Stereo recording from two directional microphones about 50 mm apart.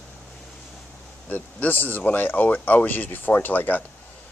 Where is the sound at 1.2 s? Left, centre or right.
Left.